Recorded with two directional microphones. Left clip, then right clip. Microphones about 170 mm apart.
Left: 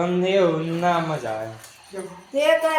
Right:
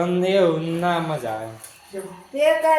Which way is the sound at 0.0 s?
20° right (ahead or behind).